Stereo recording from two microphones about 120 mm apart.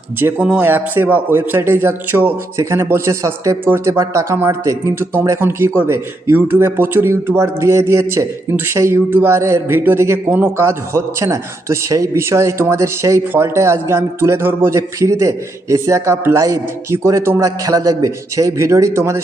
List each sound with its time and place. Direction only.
0.4 s speech: 15° right (ahead or behind)